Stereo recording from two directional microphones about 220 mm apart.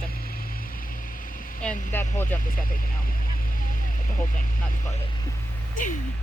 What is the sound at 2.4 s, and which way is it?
Speech, 40° left (ahead or behind).